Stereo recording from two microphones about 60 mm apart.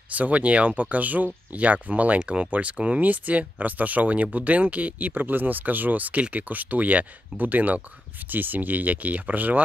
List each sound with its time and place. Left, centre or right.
0.1 s speech: right